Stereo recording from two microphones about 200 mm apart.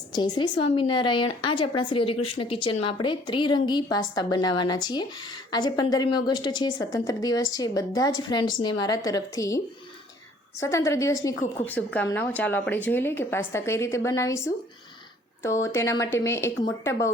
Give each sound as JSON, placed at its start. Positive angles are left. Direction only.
{"t": 0.1, "sound": "a woman's voice", "side_deg": 20}
{"t": 10.7, "sound": "speech", "side_deg": 15}
{"t": 15.4, "sound": "speech", "side_deg": 15}